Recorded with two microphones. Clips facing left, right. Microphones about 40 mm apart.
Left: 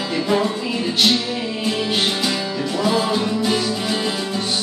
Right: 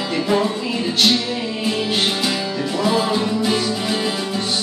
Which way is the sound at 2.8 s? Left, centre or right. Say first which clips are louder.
Right 1 dB; centre.